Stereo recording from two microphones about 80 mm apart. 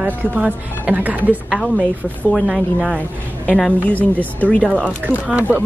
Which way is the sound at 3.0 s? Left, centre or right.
Centre.